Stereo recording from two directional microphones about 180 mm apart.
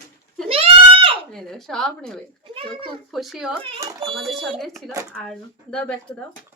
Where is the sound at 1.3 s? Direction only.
Centre (ahead or behind).